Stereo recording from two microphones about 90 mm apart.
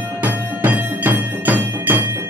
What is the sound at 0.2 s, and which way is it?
Music, 20° right (ahead or behind).